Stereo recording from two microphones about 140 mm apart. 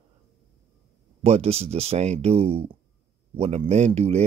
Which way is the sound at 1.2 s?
50° right (ahead or behind).